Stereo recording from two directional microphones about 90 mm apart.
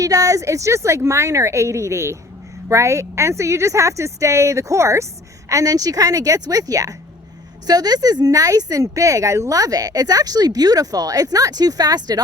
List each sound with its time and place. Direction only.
0.0 s a woman's voice: 40° right (ahead or behind)